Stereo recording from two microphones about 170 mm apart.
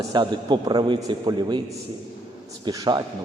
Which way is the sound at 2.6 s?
25° right (ahead or behind).